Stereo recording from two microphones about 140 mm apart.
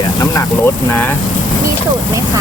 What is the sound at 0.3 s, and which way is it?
Speech, 15° left (ahead or behind).